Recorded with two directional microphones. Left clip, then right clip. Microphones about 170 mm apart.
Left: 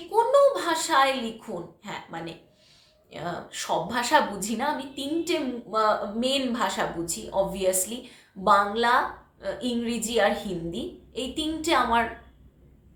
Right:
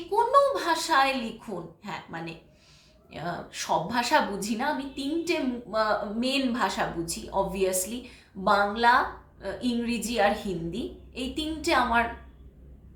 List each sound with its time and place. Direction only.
0.1 s a woman's voice: 20° left (ahead or behind)